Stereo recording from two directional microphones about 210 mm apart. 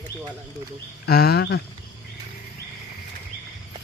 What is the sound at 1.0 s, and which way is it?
Speech, 50° left (ahead or behind).